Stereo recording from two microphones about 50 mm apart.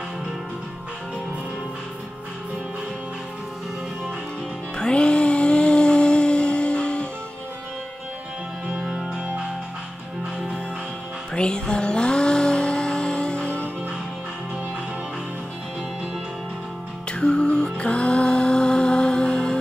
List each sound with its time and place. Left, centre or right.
4.7 s music: centre
8.7 s music: centre
11.3 s music: centre
17.1 s music: centre